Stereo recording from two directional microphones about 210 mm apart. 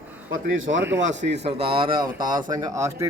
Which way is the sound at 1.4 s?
25° right (ahead or behind).